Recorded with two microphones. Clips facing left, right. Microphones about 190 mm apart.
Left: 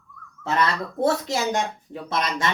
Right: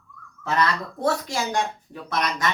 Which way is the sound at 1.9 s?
25° left (ahead or behind).